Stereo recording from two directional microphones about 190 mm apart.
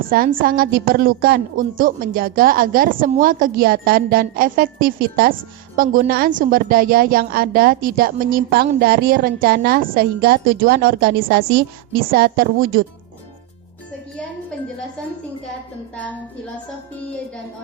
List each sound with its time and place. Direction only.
0.0 s a woman's voice: 50° right (ahead or behind)